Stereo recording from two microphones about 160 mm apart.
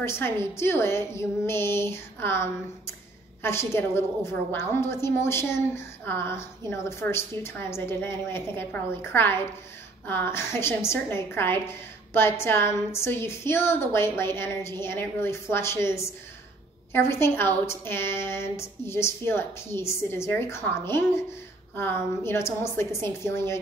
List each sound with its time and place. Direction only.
0.0 s a woman's voice: 15° left (ahead or behind)